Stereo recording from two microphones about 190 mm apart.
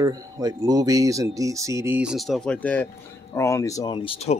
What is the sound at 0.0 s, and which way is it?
Speech, 20° right (ahead or behind).